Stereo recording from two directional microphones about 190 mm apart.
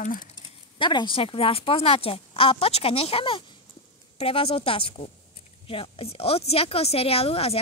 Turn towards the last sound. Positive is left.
turn(degrees=30)  # may be behind; listen again after turning